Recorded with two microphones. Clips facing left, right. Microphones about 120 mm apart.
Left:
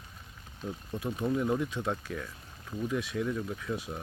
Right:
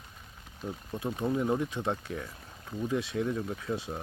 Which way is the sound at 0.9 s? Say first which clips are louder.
Even; 20° right (ahead or behind).